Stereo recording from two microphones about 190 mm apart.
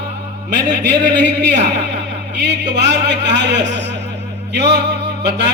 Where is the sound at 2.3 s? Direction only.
65° right (ahead or behind).